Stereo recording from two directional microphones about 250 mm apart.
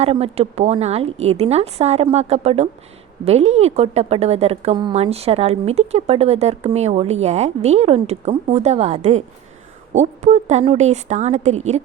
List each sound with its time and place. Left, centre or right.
0.0 s a woman's voice: right